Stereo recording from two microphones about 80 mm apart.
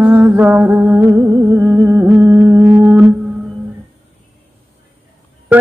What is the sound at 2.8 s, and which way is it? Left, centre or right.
Music, right.